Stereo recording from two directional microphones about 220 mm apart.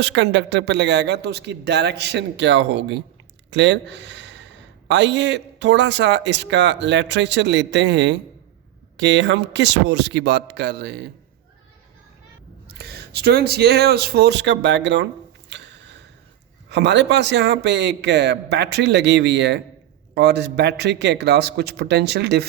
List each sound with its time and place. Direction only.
0.0 s speech: 55° right (ahead or behind)
12.7 s speech: 50° right (ahead or behind)
15.4 s a sound: 55° right (ahead or behind)
16.6 s speech: 50° right (ahead or behind)